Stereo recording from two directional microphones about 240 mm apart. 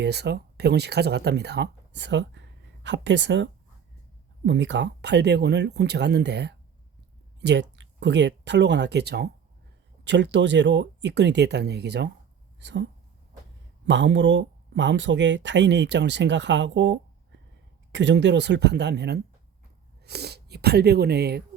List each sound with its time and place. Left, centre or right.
0.0 s speech: right